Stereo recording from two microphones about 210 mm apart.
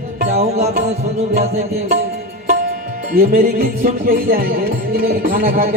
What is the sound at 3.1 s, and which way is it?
Music, 45° right (ahead or behind).